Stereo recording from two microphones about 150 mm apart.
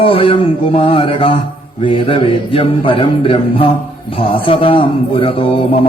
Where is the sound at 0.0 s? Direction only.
35° left (ahead or behind).